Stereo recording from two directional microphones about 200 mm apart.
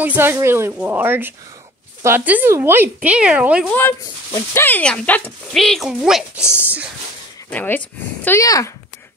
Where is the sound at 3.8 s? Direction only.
10° left (ahead or behind).